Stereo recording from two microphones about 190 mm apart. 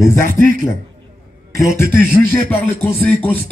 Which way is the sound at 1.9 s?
10° left (ahead or behind).